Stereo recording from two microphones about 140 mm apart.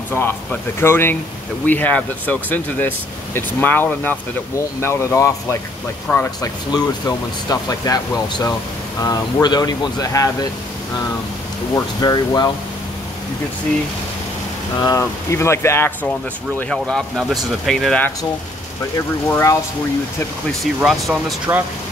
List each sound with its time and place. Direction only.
0.1 s speech: 15° left (ahead or behind)
6.7 s speech: 25° left (ahead or behind)
11.7 s speech: 25° left (ahead or behind)
14.8 s speech: 25° left (ahead or behind)
16.5 s speech: 5° left (ahead or behind)
19.2 s speech: 20° left (ahead or behind)
20.8 s speech: 5° right (ahead or behind)